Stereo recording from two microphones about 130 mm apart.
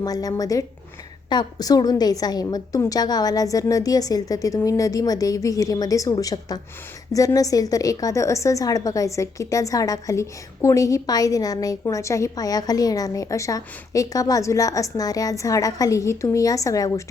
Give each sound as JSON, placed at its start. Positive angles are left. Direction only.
{"t": 0.0, "sound": "a woman's voice", "side_deg": 30}